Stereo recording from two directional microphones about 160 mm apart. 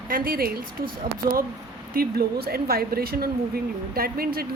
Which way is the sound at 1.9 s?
70° right (ahead or behind).